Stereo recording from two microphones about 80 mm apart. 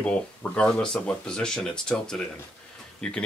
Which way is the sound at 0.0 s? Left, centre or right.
Centre.